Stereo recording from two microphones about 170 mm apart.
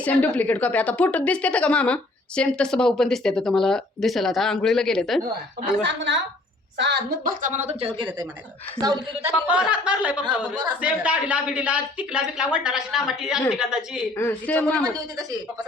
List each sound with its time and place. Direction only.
0.0 s a woman's voice: 10° left (ahead or behind)
5.8 s a woman's voice: 90° right
7.4 s speech: 45° right (ahead or behind)
8.8 s a woman's voice: 20° right (ahead or behind)
9.3 s a woman's voice: 5° right (ahead or behind)
14.2 s a man's voice: 10° left (ahead or behind)